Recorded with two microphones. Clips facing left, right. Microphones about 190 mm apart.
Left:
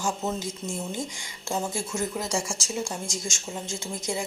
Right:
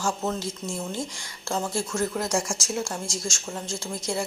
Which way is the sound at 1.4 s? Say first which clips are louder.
Right 2 dB; 20° left (ahead or behind).